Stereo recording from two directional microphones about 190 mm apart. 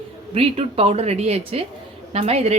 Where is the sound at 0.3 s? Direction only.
30° right (ahead or behind).